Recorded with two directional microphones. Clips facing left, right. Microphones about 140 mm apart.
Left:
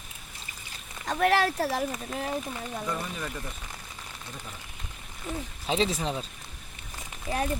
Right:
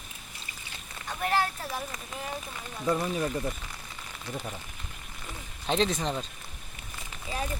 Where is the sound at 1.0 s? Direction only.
85° left.